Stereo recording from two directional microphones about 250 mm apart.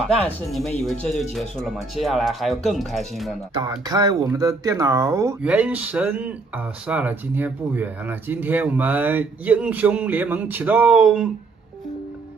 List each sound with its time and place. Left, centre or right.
0.0 s speech: centre
3.5 s speech: centre